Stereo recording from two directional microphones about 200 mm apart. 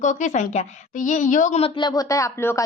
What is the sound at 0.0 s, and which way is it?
A woman's voice, 35° left (ahead or behind).